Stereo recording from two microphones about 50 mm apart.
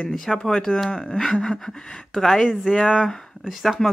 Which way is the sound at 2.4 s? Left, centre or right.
Centre.